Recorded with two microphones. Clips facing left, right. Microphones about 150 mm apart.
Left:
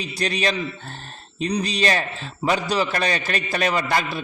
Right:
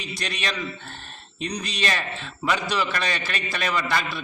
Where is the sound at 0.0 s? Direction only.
35° left (ahead or behind).